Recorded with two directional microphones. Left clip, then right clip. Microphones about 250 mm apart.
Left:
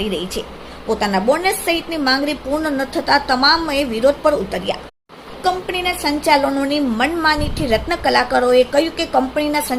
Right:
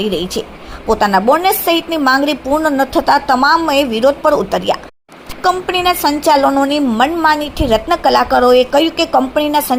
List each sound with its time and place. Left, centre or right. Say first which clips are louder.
0.9 s a woman's voice: right 6 dB; centre